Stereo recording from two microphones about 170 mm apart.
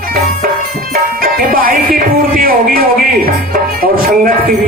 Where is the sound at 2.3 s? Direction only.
60° right (ahead or behind).